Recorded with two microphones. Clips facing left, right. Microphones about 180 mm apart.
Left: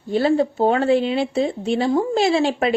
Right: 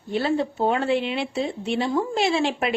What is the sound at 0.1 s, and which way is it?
Speech, 40° left (ahead or behind).